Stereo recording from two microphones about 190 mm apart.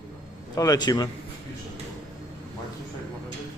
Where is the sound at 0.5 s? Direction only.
20° left (ahead or behind).